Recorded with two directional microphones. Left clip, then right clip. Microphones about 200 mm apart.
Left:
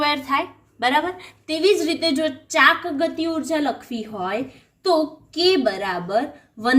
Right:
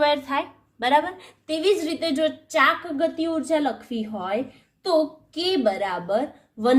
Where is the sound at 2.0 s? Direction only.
40° right (ahead or behind).